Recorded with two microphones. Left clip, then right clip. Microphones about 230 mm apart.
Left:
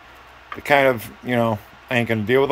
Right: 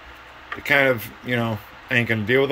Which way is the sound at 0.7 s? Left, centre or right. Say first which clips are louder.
Left 2 dB; centre.